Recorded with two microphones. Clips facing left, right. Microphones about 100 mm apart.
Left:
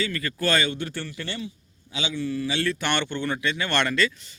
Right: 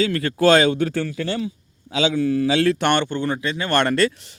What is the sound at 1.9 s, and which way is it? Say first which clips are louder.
Speech: right 9 dB; 90° right.